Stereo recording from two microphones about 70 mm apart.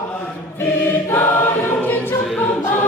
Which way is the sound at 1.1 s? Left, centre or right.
Left.